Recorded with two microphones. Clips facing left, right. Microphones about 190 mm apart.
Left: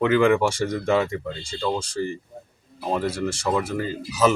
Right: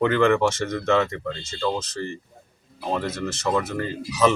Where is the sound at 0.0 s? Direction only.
5° left (ahead or behind).